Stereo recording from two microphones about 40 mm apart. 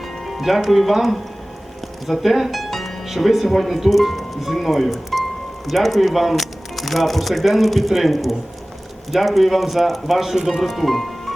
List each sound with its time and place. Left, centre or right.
0.3 s speech: centre